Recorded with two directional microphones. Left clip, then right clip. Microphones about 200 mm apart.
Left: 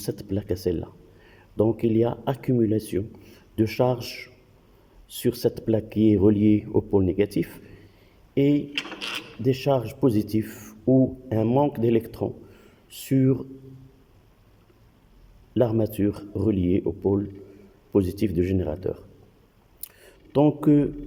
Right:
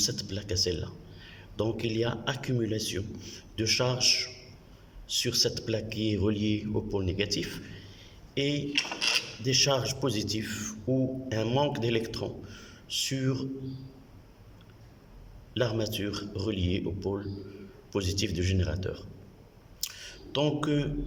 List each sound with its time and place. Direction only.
0.0 s speech: 30° left (ahead or behind)
15.5 s speech: 30° left (ahead or behind)
19.9 s a sound: 35° left (ahead or behind)
20.6 s speech: 40° left (ahead or behind)